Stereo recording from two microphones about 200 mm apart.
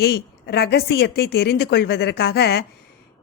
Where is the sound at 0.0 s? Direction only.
55° left (ahead or behind).